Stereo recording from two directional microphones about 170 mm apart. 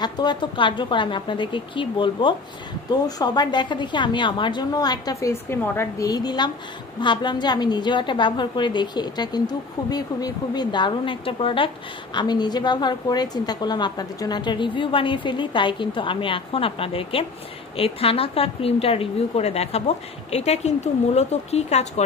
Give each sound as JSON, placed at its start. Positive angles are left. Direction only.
{"t": 0.0, "sound": "a woman's voice", "side_deg": 25}